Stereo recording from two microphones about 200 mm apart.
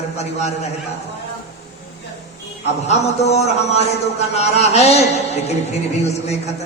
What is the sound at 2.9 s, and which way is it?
A man's voice, 35° left (ahead or behind).